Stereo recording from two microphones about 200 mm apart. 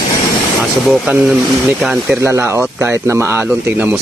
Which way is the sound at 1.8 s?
5° right (ahead or behind).